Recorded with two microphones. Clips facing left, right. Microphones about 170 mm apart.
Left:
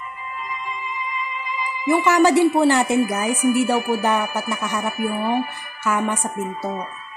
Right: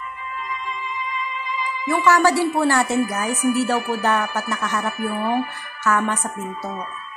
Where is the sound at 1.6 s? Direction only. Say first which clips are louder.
Left 3 dB; 15° left (ahead or behind).